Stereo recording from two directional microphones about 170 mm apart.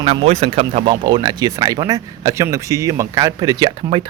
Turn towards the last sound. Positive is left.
turn(degrees=-25)  # may be behind; listen again after turning